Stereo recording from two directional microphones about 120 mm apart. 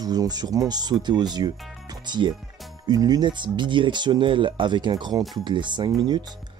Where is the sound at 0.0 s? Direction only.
35° right (ahead or behind).